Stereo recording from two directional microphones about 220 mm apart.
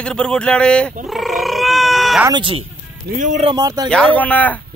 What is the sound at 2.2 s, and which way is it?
Speech, 20° right (ahead or behind).